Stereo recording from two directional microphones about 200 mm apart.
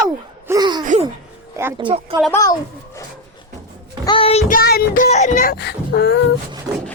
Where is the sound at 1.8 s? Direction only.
25° right (ahead or behind).